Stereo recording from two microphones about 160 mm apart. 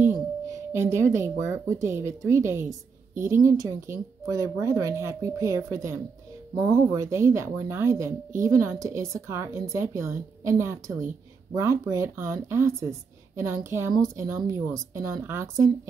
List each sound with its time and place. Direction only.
0.0 s a woman's voice: 15° right (ahead or behind)